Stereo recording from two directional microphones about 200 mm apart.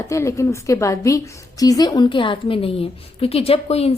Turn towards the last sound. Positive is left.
turn(degrees=30)  # may be behind; listen again after turning